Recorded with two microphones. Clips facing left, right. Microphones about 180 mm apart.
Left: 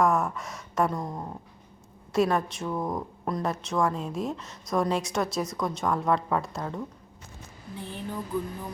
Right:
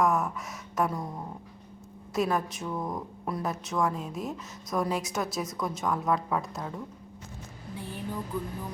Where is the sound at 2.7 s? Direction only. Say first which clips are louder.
Left 3 dB; 25° left (ahead or behind).